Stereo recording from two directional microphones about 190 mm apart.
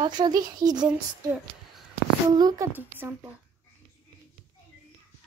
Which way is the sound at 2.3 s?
20° right (ahead or behind).